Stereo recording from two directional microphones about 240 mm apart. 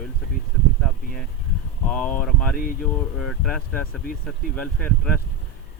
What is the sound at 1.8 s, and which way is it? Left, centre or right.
Speech, centre.